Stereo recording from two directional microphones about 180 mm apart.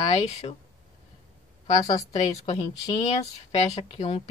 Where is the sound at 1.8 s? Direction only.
20° left (ahead or behind).